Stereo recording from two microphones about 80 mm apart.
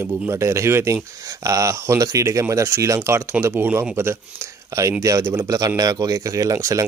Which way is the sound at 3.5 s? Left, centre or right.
Right.